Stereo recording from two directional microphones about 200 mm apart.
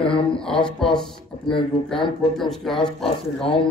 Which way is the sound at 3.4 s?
25° left (ahead or behind).